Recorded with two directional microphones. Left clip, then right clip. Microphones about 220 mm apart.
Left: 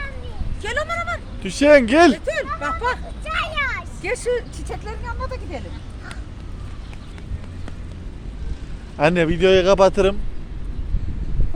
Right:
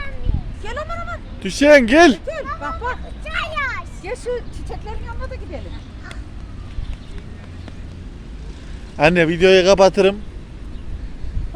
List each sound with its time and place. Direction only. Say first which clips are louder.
0.6 s a sound: left 4 dB; 25° left (ahead or behind)
1.4 s speech: right 2 dB; 15° right (ahead or behind)
2.2 s a sound: left 3 dB; 25° left (ahead or behind)
2.6 s hubbub: left 3 dB; 25° left (ahead or behind)
3.2 s vehicle: even; centre (ahead or behind)
4.0 s speech: left 4 dB; 30° left (ahead or behind)
9.0 s a man's voice: right 3 dB; 20° right (ahead or behind)